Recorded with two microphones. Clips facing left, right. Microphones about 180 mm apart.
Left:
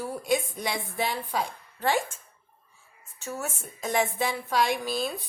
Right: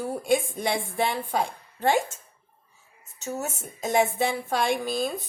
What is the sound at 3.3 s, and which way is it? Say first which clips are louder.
Speech: right 3 dB; 20° right (ahead or behind).